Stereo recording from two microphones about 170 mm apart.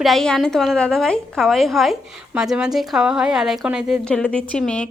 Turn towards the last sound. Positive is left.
turn(degrees=5)  # may be behind; listen again after turning